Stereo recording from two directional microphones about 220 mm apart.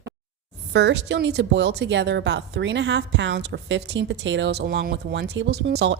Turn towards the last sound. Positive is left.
turn(degrees=-50)  # may be behind; listen again after turning